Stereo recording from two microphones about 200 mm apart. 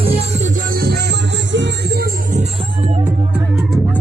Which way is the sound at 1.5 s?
60° right (ahead or behind).